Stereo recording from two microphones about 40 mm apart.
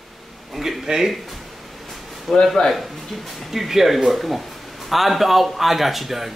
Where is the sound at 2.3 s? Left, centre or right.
Centre.